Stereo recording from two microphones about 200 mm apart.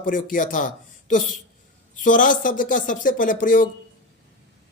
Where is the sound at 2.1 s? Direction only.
40° left (ahead or behind).